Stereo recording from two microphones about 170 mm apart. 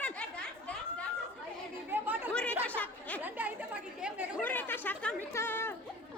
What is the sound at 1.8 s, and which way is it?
Speech, 10° right (ahead or behind).